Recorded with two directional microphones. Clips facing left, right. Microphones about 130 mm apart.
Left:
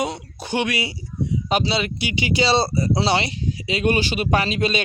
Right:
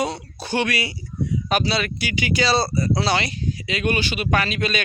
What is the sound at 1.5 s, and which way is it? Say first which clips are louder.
Speech: left 1 dB; 25° left (ahead or behind).